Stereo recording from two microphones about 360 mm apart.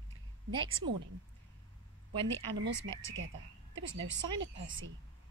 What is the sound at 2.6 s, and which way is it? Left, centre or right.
Speech, right.